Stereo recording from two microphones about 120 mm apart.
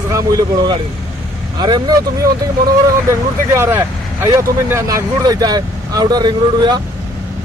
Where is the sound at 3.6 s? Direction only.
20° right (ahead or behind).